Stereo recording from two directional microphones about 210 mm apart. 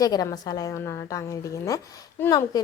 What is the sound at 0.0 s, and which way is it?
A woman's voice, 15° left (ahead or behind).